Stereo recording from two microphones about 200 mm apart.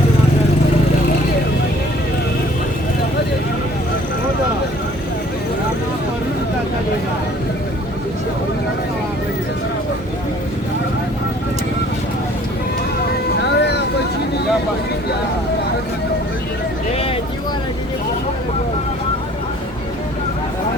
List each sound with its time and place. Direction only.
13.6 s vehicle: 55° left (ahead or behind)